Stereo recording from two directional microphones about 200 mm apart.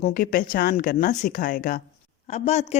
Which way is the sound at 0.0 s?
45° left (ahead or behind).